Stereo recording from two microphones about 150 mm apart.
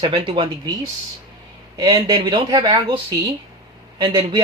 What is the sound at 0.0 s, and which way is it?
Speech, 35° right (ahead or behind).